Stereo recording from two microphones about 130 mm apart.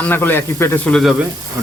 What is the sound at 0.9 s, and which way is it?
Speech, 5° left (ahead or behind).